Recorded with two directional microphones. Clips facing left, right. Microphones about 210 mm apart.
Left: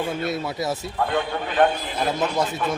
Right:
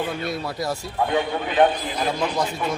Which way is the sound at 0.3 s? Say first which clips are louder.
Left 1 dB; centre (ahead or behind).